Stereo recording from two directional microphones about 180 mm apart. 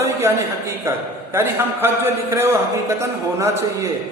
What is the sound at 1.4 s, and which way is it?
A man's voice, 10° right (ahead or behind).